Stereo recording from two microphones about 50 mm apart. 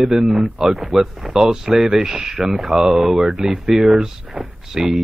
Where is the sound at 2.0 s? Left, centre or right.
Right.